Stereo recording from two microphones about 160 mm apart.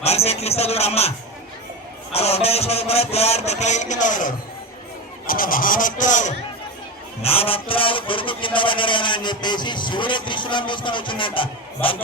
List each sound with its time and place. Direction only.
0.0 s speech: 40° left (ahead or behind)
2.1 s speech: 40° left (ahead or behind)
7.2 s speech: 40° left (ahead or behind)